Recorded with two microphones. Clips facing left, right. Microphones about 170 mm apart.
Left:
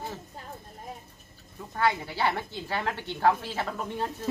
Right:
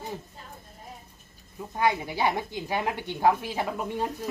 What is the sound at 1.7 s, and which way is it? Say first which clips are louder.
A woman's voice: right 1 dB; 15° right (ahead or behind).